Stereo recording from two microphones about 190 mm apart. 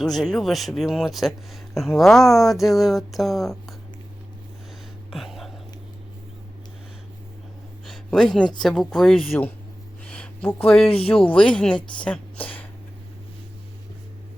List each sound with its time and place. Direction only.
0.0 s speech: centre (ahead or behind)
5.1 s whispering: centre (ahead or behind)
7.9 s speech: centre (ahead or behind)
10.1 s a sound: 5° left (ahead or behind)
10.8 s speech: 30° left (ahead or behind)
11.3 s a woman's voice: 5° left (ahead or behind)